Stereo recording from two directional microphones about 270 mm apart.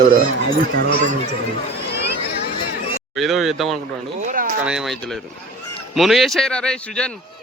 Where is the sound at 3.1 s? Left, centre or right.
Centre.